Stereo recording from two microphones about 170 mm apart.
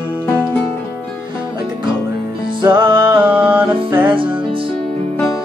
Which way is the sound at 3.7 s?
30° right (ahead or behind).